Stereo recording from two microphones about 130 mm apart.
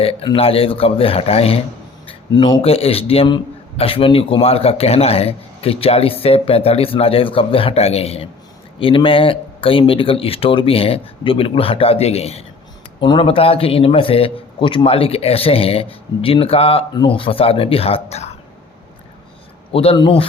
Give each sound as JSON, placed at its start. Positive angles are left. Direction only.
{"t": 0.3, "sound": "a man's voice", "side_deg": 45}
{"t": 2.0, "sound": "a man's voice", "side_deg": 40}
{"t": 13.0, "sound": "a man's voice", "side_deg": 40}
{"t": 19.7, "sound": "a man's voice", "side_deg": 50}